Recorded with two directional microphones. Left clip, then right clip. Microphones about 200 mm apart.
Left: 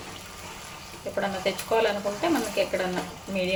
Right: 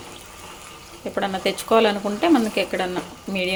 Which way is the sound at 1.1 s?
45° right (ahead or behind).